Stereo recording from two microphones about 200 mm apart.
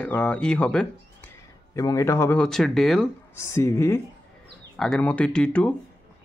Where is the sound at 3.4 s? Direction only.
15° left (ahead or behind).